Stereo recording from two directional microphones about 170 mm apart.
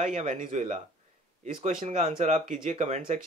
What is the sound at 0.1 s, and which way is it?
Speech, 45° right (ahead or behind).